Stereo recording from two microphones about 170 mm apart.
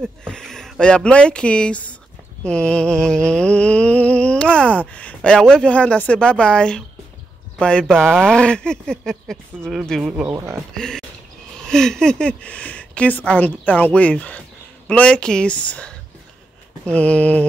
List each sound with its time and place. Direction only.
0.0 s speech: 5° left (ahead or behind)
2.4 s mantra: 5° left (ahead or behind)
10.3 s speech: 15° right (ahead or behind)
10.7 s mantra: 5° left (ahead or behind)
11.6 s speech: 5° left (ahead or behind)